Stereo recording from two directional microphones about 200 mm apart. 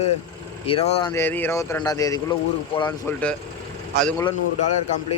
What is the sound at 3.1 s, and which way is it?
Speech, 5° left (ahead or behind).